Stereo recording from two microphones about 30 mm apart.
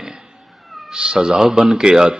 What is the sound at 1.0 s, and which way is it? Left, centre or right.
Speech, right.